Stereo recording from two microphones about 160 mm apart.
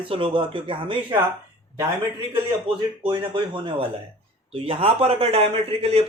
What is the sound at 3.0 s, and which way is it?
A man's voice, 30° right (ahead or behind).